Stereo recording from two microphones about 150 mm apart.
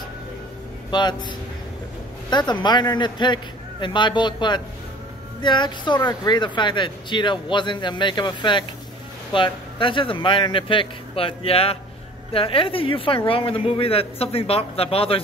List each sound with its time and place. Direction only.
0.8 s speech: 30° left (ahead or behind)
2.3 s speech: 30° left (ahead or behind)